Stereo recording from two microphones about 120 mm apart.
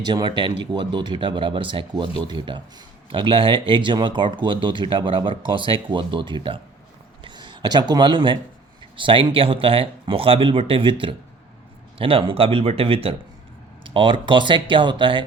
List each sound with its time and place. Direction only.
0.0 s speech: 35° right (ahead or behind)